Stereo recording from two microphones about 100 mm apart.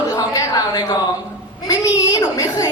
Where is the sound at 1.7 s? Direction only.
35° left (ahead or behind).